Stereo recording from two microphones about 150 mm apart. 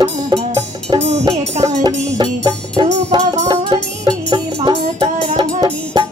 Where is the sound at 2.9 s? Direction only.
50° right (ahead or behind).